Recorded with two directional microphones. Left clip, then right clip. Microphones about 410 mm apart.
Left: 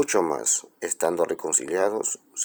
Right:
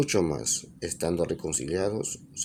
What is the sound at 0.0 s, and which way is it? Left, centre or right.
Speech, centre.